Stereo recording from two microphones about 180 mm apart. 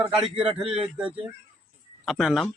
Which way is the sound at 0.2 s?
30° right (ahead or behind).